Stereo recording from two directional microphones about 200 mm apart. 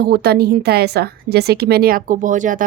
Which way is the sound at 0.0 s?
50° right (ahead or behind).